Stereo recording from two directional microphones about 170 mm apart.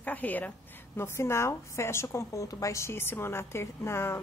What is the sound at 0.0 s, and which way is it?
A woman's voice, 10° left (ahead or behind).